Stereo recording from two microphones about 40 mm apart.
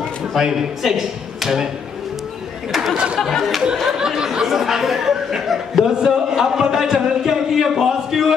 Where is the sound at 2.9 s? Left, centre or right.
Right.